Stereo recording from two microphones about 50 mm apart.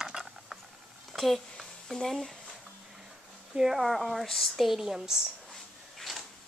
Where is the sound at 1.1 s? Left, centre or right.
Centre.